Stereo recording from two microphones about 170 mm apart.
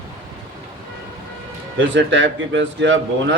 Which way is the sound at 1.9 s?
90° right.